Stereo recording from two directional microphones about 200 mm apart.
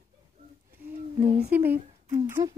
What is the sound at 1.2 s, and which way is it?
Humming, 40° right (ahead or behind).